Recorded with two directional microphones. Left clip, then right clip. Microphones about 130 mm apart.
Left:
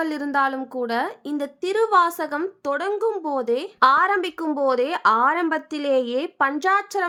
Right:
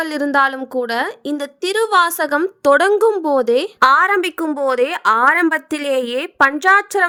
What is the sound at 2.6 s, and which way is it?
Speech, 75° right (ahead or behind).